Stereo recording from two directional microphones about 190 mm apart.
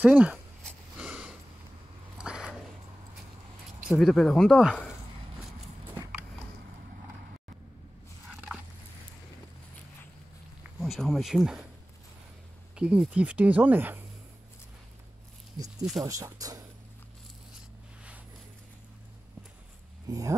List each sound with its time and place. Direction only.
0.0 s speech: 5° right (ahead or behind)
0.7 s a sound: 5° right (ahead or behind)
3.8 s speech: centre (ahead or behind)
8.3 s a sound: 5° right (ahead or behind)
10.8 s speech: centre (ahead or behind)
12.7 s speech: 5° right (ahead or behind)
16.0 s speech: 15° right (ahead or behind)
20.1 s speech: 20° right (ahead or behind)